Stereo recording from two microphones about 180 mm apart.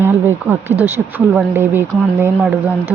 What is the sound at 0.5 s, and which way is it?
Speech, 10° right (ahead or behind).